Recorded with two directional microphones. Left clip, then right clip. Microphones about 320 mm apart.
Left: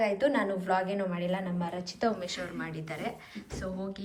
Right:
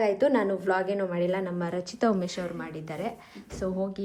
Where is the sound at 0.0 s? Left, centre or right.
Right.